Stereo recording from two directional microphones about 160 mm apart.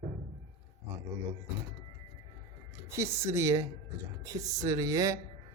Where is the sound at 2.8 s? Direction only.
20° right (ahead or behind).